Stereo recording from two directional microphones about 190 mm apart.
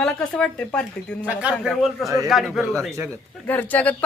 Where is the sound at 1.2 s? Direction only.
5° right (ahead or behind).